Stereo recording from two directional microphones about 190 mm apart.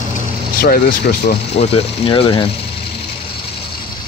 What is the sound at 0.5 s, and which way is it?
Speech, 50° left (ahead or behind).